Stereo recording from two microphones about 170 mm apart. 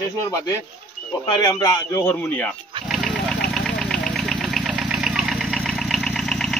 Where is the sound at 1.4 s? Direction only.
20° left (ahead or behind).